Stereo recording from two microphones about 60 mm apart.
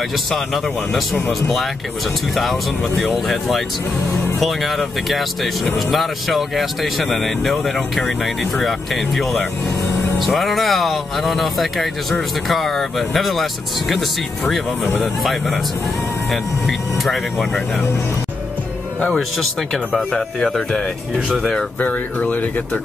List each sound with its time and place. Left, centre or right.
2.3 s speech: centre
15.2 s speech: centre
19.1 s speech: centre
21.7 s speech: left